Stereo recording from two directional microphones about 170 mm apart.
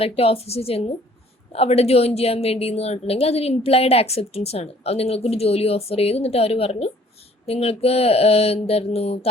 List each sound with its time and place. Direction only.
0.0 s a woman's voice: 35° left (ahead or behind)